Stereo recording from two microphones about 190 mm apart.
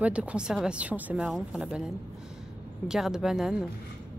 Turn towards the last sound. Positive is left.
turn(degrees=-5)  # may be behind; listen again after turning